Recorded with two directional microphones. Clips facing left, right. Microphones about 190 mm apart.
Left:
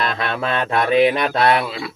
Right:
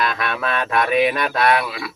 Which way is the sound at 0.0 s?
25° left (ahead or behind).